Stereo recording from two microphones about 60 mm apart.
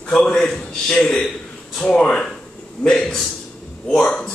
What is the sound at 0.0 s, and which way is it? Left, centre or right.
A man's voice, centre.